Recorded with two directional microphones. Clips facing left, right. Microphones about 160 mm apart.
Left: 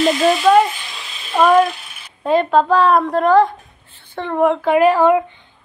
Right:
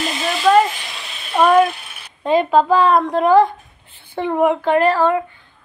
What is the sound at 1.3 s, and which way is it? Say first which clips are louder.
A woman's voice: even; 5° right (ahead or behind).